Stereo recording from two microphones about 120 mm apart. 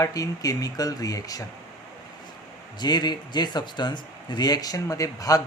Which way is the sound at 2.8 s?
35° left (ahead or behind).